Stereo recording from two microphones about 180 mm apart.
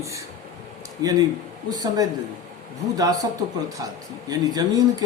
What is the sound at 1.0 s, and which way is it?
A man's voice, 20° right (ahead or behind).